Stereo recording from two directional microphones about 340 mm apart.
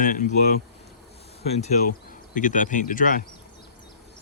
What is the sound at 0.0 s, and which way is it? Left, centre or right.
Speech, left.